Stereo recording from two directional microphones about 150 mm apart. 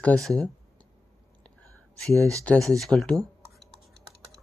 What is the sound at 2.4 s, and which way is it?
Speech, 10° left (ahead or behind).